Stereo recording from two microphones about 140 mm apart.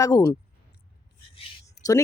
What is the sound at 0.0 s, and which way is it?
Speech, 25° left (ahead or behind).